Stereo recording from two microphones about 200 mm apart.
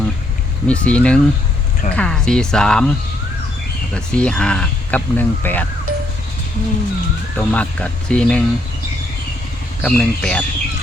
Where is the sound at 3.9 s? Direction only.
5° left (ahead or behind).